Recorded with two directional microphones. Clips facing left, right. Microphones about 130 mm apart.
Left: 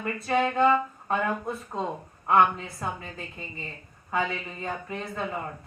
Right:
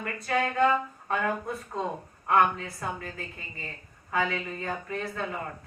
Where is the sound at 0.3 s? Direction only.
25° left (ahead or behind).